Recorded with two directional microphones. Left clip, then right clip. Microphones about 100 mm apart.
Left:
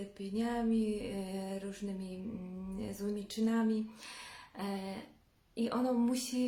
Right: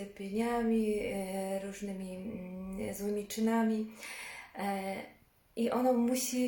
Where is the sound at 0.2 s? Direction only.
25° left (ahead or behind).